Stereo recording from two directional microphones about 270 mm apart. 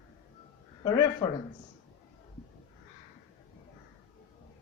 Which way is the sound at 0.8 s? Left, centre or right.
Centre.